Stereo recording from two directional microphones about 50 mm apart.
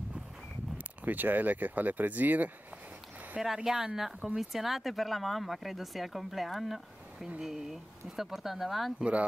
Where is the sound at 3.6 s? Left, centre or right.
Centre.